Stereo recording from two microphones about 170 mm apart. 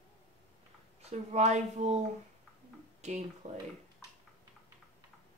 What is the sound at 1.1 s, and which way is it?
Speech, 40° right (ahead or behind).